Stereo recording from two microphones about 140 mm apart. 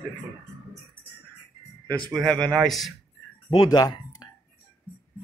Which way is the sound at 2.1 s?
5° left (ahead or behind).